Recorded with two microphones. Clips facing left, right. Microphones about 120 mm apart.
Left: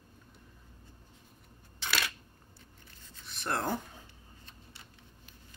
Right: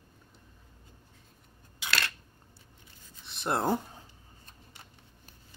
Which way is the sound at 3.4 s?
25° right (ahead or behind).